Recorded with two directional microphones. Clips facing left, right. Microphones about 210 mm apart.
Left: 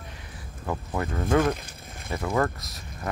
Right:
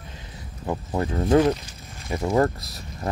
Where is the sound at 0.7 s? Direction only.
30° right (ahead or behind).